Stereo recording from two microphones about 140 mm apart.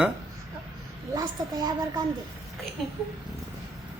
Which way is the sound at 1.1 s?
30° right (ahead or behind).